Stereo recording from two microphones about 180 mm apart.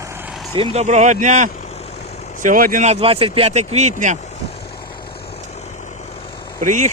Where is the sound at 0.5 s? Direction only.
35° right (ahead or behind).